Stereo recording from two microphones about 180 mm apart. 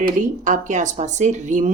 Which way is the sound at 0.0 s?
45° right (ahead or behind).